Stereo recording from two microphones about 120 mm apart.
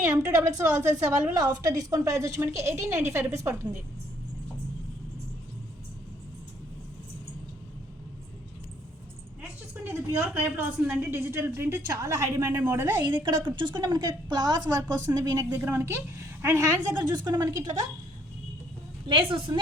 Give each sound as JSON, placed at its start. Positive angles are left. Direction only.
{"t": 0.3, "sound": "a woman's voice", "side_deg": -30}
{"t": 9.4, "sound": "a sound", "side_deg": -15}
{"t": 10.4, "sound": "a woman's voice", "side_deg": -15}
{"t": 13.2, "sound": "a woman's voice", "side_deg": -40}
{"t": 19.0, "sound": "a woman's voice", "side_deg": -45}